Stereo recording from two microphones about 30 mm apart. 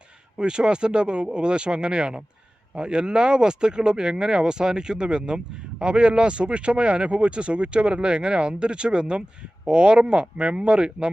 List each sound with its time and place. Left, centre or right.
0.3 s speech: right